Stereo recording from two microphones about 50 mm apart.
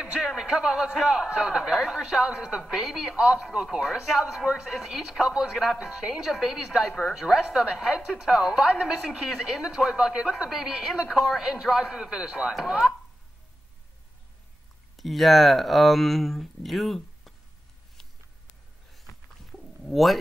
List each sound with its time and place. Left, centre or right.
0.2 s a man's voice: centre
15.0 s speech: centre
19.9 s speech: centre